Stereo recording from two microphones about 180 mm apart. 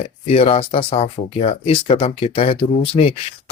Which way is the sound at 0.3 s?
35° left (ahead or behind).